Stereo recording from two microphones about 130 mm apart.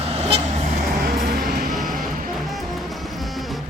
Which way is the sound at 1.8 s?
90° right.